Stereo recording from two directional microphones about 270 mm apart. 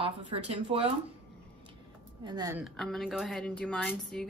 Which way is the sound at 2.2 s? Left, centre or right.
Centre.